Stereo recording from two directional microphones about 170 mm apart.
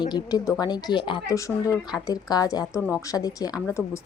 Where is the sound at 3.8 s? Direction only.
15° right (ahead or behind).